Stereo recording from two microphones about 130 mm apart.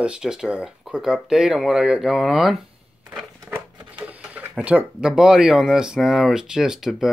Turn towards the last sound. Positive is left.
turn(degrees=-5)  # may be behind; listen again after turning